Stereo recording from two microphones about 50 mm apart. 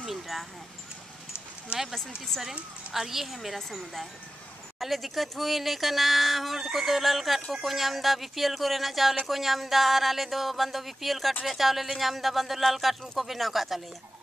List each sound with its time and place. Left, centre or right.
0.0 s a sound: centre
1.7 s speech: right
2.9 s speech: centre
4.7 s speech: centre